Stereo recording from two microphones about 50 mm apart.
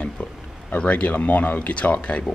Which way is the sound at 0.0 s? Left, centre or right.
Left.